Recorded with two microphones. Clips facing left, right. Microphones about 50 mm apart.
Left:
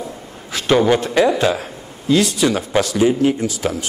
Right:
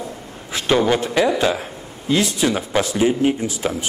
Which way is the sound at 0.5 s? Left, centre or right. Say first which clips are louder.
Left 2 dB; right.